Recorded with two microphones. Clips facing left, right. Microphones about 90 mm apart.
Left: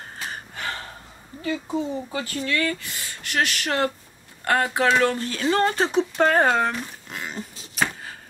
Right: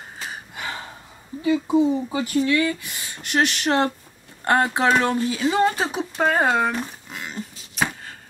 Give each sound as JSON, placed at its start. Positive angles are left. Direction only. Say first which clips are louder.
{"t": 0.3, "sound": "gasp", "louder": "even", "side_deg": -15}
{"t": 1.4, "sound": "speech", "louder": "right 8 dB", "side_deg": -15}
{"t": 7.1, "sound": "dog", "louder": "even", "side_deg": 0}